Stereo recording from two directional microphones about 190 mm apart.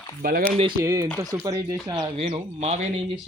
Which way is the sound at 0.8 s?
15° right (ahead or behind).